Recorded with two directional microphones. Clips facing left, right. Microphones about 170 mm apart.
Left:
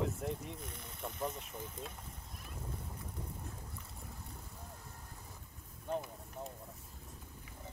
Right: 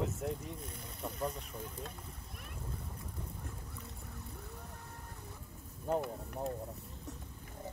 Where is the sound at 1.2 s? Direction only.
Centre (ahead or behind).